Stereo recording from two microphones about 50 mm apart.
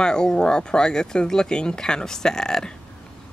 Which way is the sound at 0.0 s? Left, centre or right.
Centre.